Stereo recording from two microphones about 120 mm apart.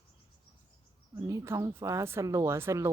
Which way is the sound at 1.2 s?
25° right (ahead or behind).